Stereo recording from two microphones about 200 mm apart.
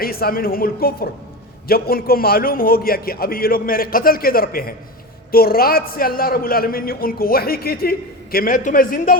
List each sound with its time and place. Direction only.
0.0 s a man's voice: 50° left (ahead or behind)